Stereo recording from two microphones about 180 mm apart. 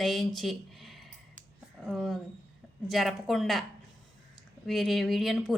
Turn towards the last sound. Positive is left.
turn(degrees=0)  # may be behind; listen again after turning